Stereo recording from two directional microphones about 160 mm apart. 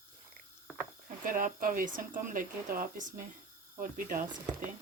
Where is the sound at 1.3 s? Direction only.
60° right (ahead or behind).